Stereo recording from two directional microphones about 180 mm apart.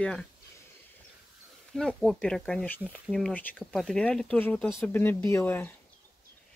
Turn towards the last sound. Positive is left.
turn(degrees=10)  # may be behind; listen again after turning